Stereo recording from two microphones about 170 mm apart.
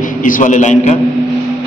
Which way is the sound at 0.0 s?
50° left (ahead or behind).